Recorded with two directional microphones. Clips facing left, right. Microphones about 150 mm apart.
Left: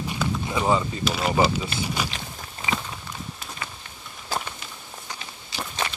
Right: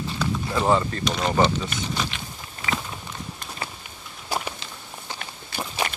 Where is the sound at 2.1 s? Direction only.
35° left (ahead or behind).